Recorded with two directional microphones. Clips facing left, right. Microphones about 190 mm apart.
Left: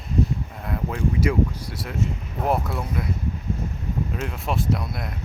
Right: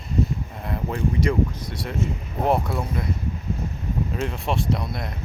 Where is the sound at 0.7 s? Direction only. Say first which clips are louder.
Even; 5° left (ahead or behind).